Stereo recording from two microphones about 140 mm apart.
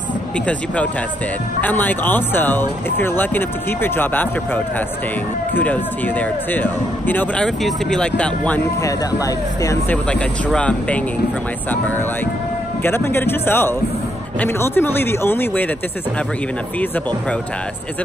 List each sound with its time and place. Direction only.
1.6 s speech: 10° left (ahead or behind)
5.5 s speech: 10° left (ahead or behind)
8.8 s speech: 25° left (ahead or behind)
9.8 s speech: 10° left (ahead or behind)
12.8 s speech: 15° left (ahead or behind)